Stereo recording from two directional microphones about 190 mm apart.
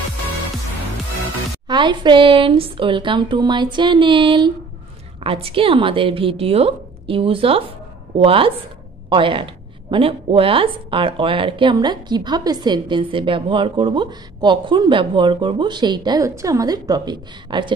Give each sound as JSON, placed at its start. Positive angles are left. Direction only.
{"t": 1.7, "sound": "a woman's voice", "side_deg": -25}